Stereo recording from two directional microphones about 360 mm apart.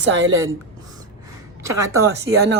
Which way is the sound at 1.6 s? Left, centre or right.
Centre.